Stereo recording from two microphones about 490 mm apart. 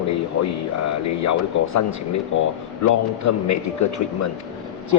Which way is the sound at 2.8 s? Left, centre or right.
Left.